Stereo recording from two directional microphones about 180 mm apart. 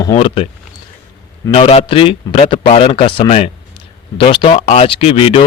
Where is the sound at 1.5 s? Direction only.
30° left (ahead or behind).